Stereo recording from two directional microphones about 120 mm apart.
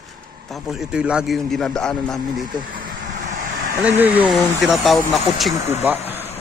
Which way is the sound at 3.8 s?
15° right (ahead or behind).